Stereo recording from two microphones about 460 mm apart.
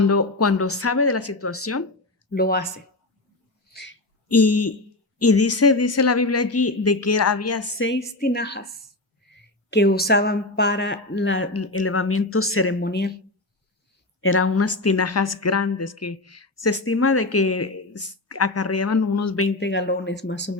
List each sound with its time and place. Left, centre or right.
0.0 s a woman's voice: left
3.7 s a sound: left
5.2 s a woman's voice: left
9.6 s a woman's voice: left
14.2 s a woman's voice: left